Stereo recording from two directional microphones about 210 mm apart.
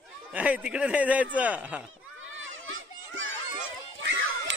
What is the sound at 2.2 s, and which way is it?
Crowd, 65° right (ahead or behind).